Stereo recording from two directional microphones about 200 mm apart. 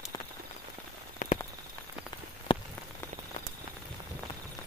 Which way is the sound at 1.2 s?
40° left (ahead or behind).